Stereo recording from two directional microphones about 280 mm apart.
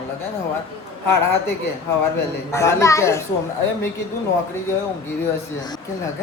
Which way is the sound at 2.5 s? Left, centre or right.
Centre.